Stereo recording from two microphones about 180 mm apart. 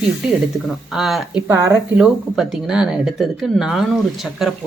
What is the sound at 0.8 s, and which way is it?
Speech, centre (ahead or behind).